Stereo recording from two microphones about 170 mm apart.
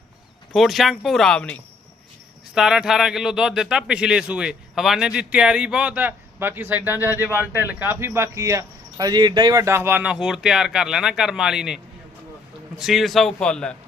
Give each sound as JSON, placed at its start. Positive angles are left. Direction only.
{"t": 0.5, "sound": "speech", "side_deg": 0}
{"t": 2.6, "sound": "speech", "side_deg": -5}
{"t": 12.8, "sound": "speech", "side_deg": 0}